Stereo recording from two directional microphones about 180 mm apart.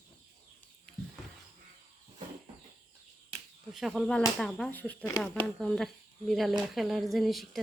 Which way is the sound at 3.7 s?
Centre (ahead or behind).